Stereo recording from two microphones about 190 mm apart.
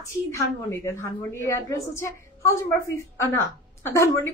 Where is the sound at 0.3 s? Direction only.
15° left (ahead or behind).